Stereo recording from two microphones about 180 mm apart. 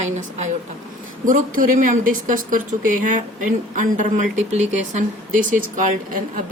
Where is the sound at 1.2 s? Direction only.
45° right (ahead or behind).